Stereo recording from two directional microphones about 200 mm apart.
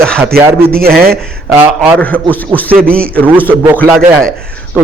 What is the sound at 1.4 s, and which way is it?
Speech, 10° right (ahead or behind).